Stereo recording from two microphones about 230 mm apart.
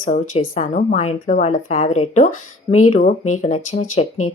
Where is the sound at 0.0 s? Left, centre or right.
Left.